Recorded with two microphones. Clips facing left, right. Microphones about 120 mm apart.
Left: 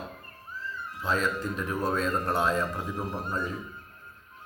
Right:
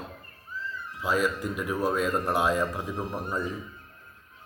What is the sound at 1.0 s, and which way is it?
A man's voice, 10° right (ahead or behind).